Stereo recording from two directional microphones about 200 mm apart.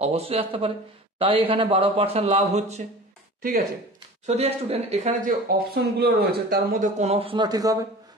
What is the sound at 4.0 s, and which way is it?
A man's voice, 30° right (ahead or behind).